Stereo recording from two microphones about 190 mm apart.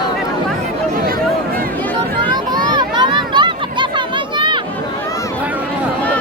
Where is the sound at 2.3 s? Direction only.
20° right (ahead or behind).